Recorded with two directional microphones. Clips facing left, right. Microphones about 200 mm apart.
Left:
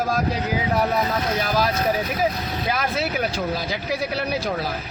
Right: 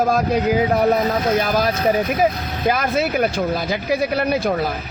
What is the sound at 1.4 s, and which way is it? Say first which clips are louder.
Speech: right 3 dB; 50° right (ahead or behind).